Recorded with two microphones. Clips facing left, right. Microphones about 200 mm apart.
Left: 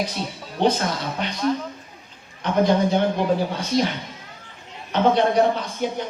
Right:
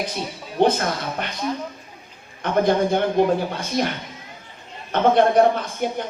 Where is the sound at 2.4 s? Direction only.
50° right (ahead or behind).